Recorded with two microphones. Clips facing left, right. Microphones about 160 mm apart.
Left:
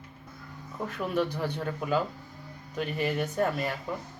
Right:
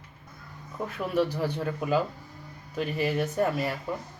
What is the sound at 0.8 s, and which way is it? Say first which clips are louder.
Speech: right 2 dB; 5° right (ahead or behind).